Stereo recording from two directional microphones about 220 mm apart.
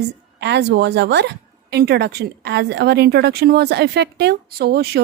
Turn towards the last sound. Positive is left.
turn(degrees=-45)  # may be behind; listen again after turning